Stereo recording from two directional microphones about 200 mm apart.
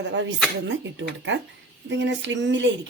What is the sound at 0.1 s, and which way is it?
Speech, 65° right (ahead or behind).